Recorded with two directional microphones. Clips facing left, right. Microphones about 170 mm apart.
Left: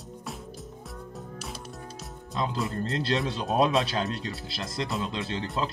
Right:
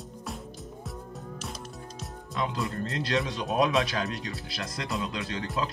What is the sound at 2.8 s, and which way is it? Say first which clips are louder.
Speech: left 1 dB; 30° left (ahead or behind).